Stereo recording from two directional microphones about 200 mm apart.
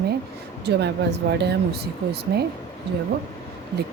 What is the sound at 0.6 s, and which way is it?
Speech, 55° right (ahead or behind).